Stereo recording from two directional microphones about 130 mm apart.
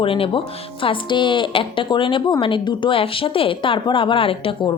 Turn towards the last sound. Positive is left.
turn(degrees=40)  # may be behind; listen again after turning